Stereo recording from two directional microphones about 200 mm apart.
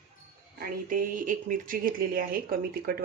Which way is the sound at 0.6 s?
40° right (ahead or behind).